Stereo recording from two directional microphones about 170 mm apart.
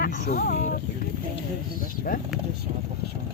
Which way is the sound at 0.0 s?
55° left (ahead or behind).